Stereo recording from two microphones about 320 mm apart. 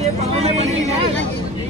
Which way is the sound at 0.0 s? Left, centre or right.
Centre.